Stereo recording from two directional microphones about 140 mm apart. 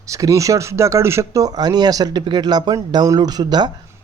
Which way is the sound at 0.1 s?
25° right (ahead or behind).